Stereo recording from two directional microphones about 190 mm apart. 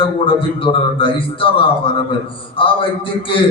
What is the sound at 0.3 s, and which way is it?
A man's voice, 25° left (ahead or behind).